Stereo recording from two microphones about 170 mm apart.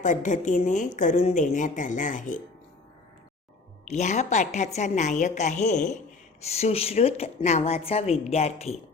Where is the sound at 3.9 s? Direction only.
40° left (ahead or behind).